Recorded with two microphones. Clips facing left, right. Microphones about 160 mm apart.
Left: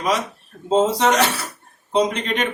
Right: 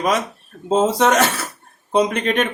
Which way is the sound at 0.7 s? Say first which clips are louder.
Right 1 dB; 50° right (ahead or behind).